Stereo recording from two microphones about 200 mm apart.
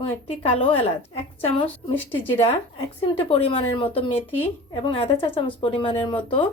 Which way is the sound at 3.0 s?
25° left (ahead or behind).